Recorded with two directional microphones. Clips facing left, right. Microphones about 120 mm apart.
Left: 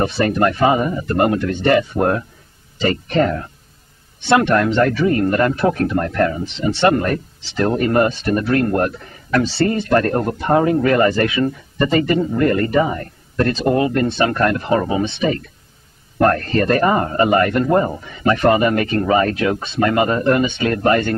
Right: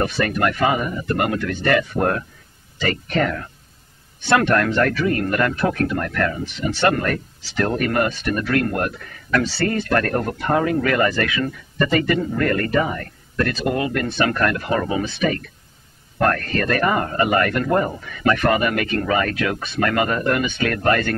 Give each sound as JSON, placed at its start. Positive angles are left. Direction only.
{"t": 0.0, "sound": "a man's voice", "side_deg": 30}